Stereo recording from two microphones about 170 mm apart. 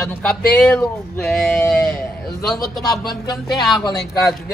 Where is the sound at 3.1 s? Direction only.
25° left (ahead or behind).